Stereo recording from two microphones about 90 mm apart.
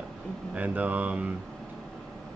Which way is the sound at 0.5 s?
15° right (ahead or behind).